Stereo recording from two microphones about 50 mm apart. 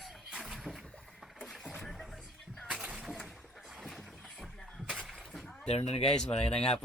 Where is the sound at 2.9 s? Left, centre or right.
Centre.